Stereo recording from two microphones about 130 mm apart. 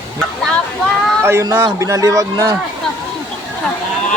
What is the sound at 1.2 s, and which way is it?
Speech, 20° right (ahead or behind).